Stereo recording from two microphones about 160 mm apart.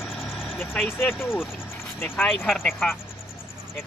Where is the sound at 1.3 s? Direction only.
Centre (ahead or behind).